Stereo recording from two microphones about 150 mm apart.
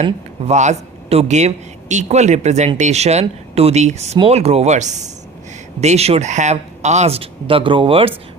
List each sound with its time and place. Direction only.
0.0 s speech: 50° right (ahead or behind)